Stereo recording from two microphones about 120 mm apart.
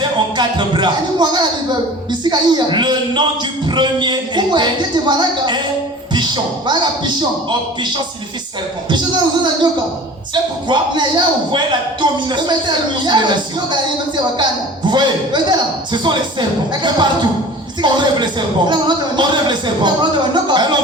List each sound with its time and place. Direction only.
0.0 s a man's voice: 40° right (ahead or behind)
6.1 s music: 40° right (ahead or behind)
8.9 s a man's voice: 40° right (ahead or behind)
14.8 s a man's voice: 40° right (ahead or behind)